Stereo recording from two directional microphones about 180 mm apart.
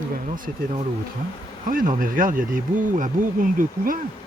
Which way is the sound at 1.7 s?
50° right (ahead or behind).